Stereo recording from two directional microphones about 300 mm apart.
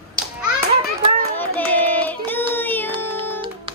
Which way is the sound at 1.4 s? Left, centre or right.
Centre.